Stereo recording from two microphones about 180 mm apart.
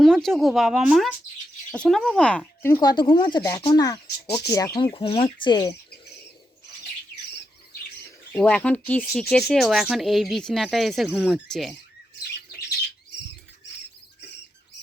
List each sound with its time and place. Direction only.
0.0 s speech: centre (ahead or behind)
2.7 s speech: 25° left (ahead or behind)
8.3 s speech: 5° left (ahead or behind)